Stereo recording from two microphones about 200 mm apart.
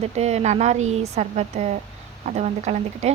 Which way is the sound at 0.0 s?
30° right (ahead or behind).